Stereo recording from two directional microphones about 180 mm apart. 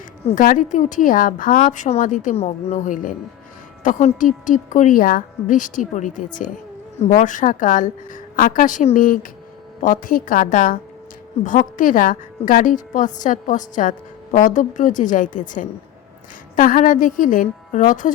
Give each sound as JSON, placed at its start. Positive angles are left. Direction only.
{"t": 0.3, "sound": "speech", "side_deg": 45}